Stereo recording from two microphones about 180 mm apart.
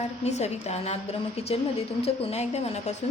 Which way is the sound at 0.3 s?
40° left (ahead or behind).